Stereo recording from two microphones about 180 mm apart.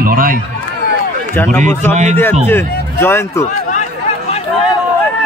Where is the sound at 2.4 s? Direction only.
10° left (ahead or behind).